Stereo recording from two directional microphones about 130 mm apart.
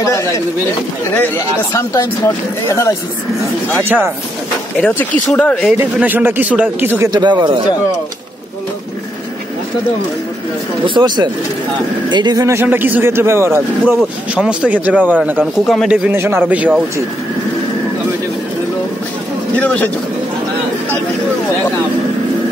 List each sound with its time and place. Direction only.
0.0 s speech: 25° left (ahead or behind)
1.7 s speech: 25° left (ahead or behind)
5.3 s speech: 10° left (ahead or behind)
5.8 s speech: 15° right (ahead or behind)
7.1 s speech: 30° right (ahead or behind)
11.0 s speech: 35° right (ahead or behind)
12.5 s a man's voice: 15° right (ahead or behind)
14.3 s speech: 10° right (ahead or behind)
15.6 s speech: centre (ahead or behind)
16.1 s speech: 20° right (ahead or behind)
19.5 s speech: 10° left (ahead or behind)